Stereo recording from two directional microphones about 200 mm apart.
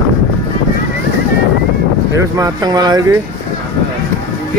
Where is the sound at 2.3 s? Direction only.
20° right (ahead or behind).